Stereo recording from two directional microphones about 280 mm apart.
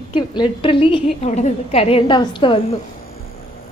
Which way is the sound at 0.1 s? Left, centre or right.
Centre.